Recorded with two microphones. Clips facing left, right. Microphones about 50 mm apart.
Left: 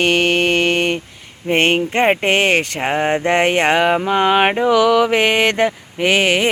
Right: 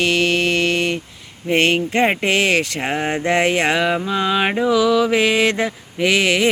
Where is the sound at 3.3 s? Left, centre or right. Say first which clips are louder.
Left 1 dB; left.